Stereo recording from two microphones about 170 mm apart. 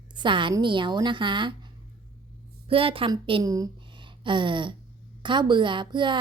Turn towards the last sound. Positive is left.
turn(degrees=-25)  # may be behind; listen again after turning